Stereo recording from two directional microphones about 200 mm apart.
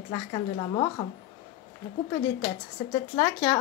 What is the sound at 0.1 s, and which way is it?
Speech, 25° left (ahead or behind).